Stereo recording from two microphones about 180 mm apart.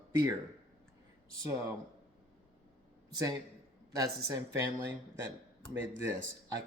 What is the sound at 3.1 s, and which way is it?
A man's voice, 20° right (ahead or behind).